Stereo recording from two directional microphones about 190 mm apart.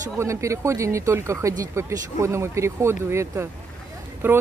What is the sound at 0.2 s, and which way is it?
Speech, 15° right (ahead or behind).